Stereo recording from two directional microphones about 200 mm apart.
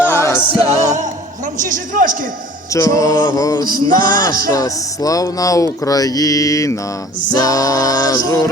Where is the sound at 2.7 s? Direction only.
15° left (ahead or behind).